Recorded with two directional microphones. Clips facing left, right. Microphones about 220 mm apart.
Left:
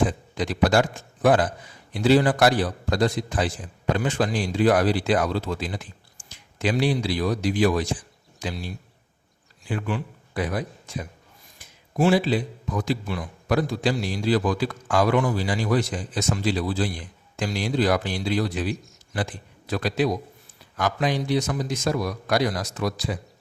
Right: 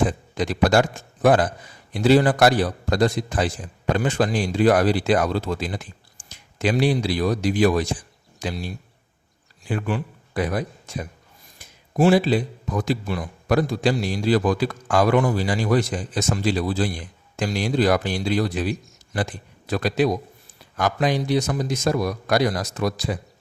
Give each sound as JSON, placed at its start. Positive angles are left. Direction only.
{"t": 0.3, "sound": "a man's voice", "side_deg": -45}
{"t": 9.6, "sound": "a man's voice", "side_deg": -45}
{"t": 19.7, "sound": "a man's voice", "side_deg": -45}